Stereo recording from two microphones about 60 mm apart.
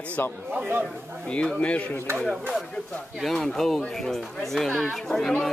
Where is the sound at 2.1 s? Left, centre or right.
Centre.